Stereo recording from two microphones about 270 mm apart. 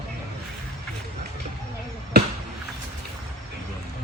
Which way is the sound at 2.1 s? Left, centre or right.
Right.